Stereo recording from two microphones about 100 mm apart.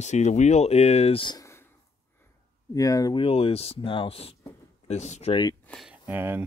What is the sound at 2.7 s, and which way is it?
Speech, 35° left (ahead or behind).